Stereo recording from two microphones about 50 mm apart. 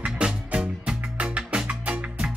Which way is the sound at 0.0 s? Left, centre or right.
Centre.